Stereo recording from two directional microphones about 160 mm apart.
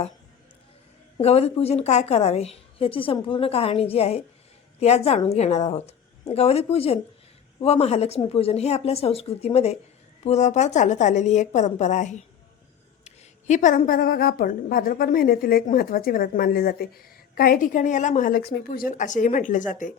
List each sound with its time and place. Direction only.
1.2 s a woman's voice: 40° left (ahead or behind)